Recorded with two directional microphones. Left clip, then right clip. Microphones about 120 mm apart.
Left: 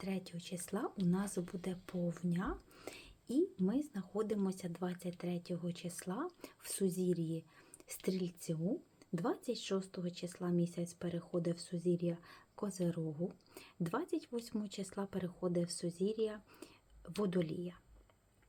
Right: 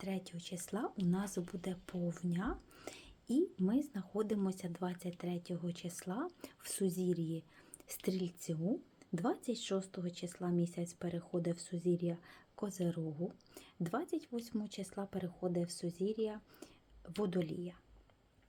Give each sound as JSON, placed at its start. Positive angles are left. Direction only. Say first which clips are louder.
{"t": 0.0, "sound": "speech", "louder": "even", "side_deg": -5}